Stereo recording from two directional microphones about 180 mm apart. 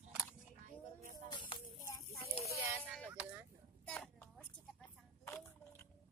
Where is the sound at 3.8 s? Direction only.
5° left (ahead or behind).